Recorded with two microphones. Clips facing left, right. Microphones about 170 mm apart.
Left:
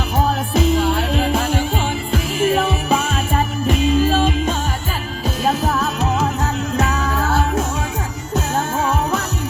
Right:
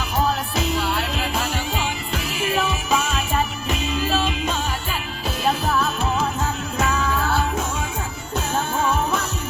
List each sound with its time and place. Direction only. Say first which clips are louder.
0.5 s music: left 6 dB; 50° left (ahead or behind)